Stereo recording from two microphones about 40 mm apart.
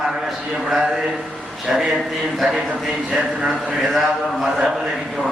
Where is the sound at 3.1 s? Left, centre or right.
Centre.